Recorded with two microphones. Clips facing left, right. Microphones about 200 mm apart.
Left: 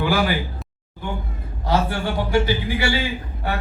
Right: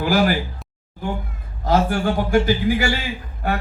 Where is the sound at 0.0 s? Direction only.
40° right (ahead or behind).